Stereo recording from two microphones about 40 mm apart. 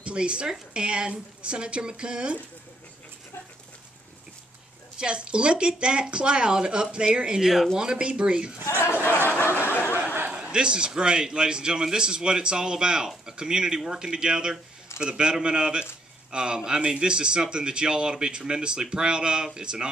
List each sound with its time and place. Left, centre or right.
0.0 s a man's voice: right
4.9 s a man's voice: right
9.2 s a sound: left
10.3 s a man's voice: right